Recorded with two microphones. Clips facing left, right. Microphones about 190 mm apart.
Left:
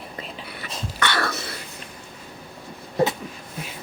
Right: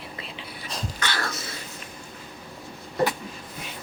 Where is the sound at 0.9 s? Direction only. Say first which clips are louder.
Left 7 dB; 65° left (ahead or behind).